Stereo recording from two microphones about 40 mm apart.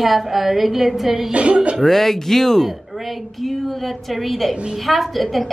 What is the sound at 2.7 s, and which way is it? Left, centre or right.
A woman's voice, centre.